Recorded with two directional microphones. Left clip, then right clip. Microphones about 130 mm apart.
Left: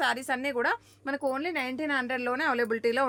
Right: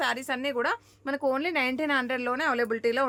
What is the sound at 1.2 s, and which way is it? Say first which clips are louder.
Speech: right 5 dB; 30° right (ahead or behind).